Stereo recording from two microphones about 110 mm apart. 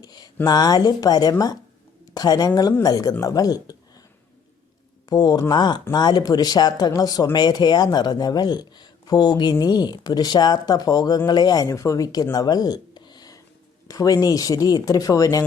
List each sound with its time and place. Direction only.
0.0 s a sound: 40° left (ahead or behind)
0.4 s speech: 35° left (ahead or behind)
5.0 s speech: 40° left (ahead or behind)